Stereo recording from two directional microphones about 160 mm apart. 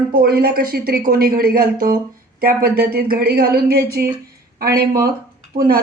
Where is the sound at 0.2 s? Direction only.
70° right (ahead or behind).